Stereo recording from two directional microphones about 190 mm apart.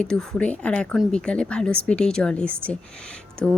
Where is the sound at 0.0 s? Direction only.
5° left (ahead or behind).